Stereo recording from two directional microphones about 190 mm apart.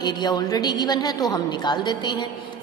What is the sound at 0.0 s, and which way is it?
A woman's voice, 20° left (ahead or behind).